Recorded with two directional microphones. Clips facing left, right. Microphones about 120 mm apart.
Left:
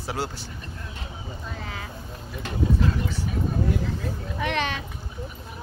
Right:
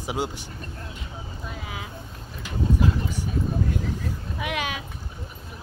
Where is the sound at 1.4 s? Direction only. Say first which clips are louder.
Even; 10° right (ahead or behind).